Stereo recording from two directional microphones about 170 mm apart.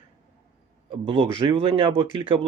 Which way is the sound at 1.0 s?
30° right (ahead or behind).